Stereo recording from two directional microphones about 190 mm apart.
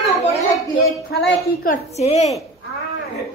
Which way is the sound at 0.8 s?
55° left (ahead or behind).